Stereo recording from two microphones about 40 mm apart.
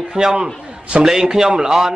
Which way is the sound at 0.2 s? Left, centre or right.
Centre.